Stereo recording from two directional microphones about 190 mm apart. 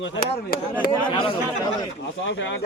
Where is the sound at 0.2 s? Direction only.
50° left (ahead or behind).